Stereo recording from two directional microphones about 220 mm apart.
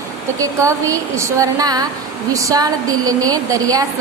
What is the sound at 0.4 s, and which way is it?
Speech, 15° right (ahead or behind).